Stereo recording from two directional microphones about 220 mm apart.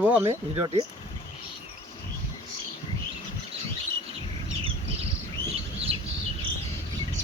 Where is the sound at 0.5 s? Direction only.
25° right (ahead or behind).